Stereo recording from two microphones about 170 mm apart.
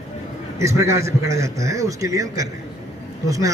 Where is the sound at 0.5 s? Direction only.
20° right (ahead or behind).